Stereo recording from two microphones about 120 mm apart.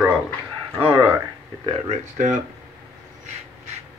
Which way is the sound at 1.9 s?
90° right.